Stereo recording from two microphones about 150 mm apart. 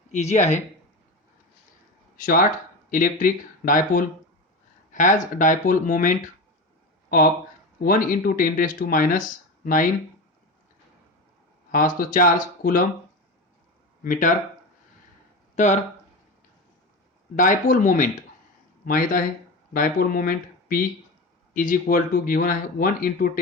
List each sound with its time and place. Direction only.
0.1 s speech: 50° left (ahead or behind)
2.1 s speech: 70° left (ahead or behind)
7.8 s speech: 70° left (ahead or behind)
11.7 s speech: 70° left (ahead or behind)
14.0 s speech: 60° left (ahead or behind)
15.5 s speech: 50° left (ahead or behind)
17.3 s speech: 60° left (ahead or behind)